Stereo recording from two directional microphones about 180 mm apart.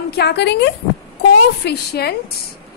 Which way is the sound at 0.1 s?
65° left (ahead or behind).